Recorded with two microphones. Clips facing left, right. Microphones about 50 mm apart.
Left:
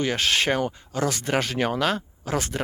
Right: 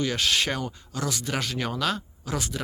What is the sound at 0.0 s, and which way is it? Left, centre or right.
Speech, left.